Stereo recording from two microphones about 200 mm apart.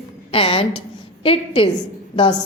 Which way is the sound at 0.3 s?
25° left (ahead or behind).